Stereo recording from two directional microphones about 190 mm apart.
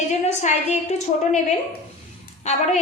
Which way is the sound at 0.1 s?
40° left (ahead or behind).